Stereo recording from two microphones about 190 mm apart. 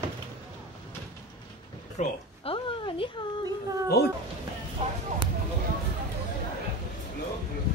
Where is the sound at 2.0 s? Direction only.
30° left (ahead or behind).